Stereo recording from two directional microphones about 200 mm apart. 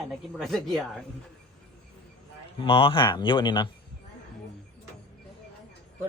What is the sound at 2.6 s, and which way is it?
Speech, 25° left (ahead or behind).